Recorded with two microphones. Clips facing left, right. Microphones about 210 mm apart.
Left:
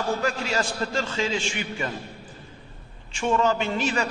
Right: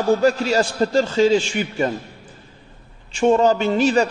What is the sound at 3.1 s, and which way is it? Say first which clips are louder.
Speech: right 7 dB; 35° right (ahead or behind).